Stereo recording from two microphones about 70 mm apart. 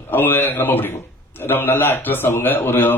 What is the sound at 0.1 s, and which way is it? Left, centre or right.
A man's voice, left.